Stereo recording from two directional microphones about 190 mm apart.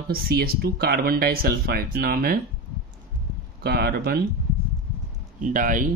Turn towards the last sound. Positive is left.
turn(degrees=-45)  # may be behind; listen again after turning